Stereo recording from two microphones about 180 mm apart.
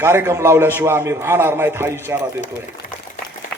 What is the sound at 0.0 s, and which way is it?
A man's voice, 15° right (ahead or behind).